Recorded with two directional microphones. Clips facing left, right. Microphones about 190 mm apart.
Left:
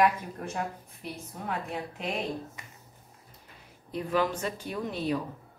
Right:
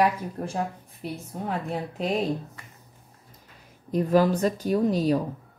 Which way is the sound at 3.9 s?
40° right (ahead or behind).